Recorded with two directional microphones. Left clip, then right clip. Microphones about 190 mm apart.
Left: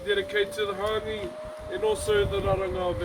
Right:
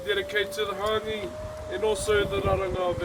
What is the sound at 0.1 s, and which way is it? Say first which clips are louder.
Speech: left 1 dB; 15° right (ahead or behind).